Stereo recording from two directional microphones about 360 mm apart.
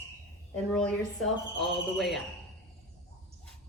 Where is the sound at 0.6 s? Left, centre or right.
Centre.